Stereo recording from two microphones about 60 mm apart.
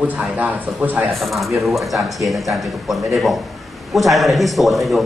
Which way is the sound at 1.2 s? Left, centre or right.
Centre.